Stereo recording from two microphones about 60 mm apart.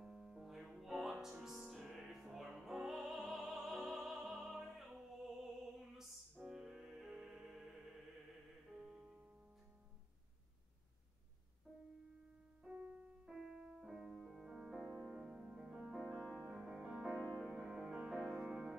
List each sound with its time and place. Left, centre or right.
0.0 s music: centre
4.6 s opera: centre
6.3 s music: centre
8.7 s music: centre
12.6 s music: centre
16.2 s music: centre
16.8 s music: centre
17.6 s music: centre